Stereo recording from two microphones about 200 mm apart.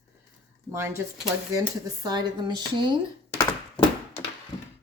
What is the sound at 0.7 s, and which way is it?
A woman's voice, 15° right (ahead or behind).